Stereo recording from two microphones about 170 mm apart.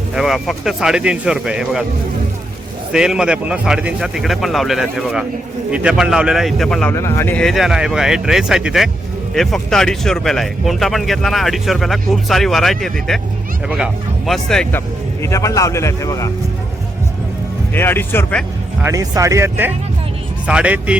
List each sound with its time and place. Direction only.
0.1 s speech: centre (ahead or behind)
2.9 s speech: 5° right (ahead or behind)
6.9 s speech: 15° left (ahead or behind)
15.2 s speech: 20° left (ahead or behind)
17.7 s speech: 15° left (ahead or behind)
18.8 s speech: 20° right (ahead or behind)